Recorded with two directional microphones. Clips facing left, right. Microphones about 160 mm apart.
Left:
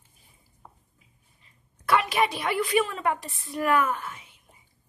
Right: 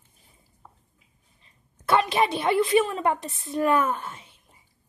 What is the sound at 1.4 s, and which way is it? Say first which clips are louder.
A woman's voice: right 3 dB; 25° right (ahead or behind).